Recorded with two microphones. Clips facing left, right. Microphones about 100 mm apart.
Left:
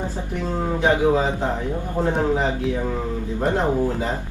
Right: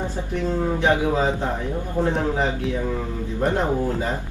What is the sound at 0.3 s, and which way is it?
A woman's voice, 15° left (ahead or behind).